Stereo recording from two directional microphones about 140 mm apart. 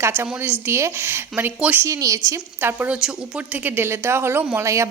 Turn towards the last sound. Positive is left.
turn(degrees=-20)  # may be behind; listen again after turning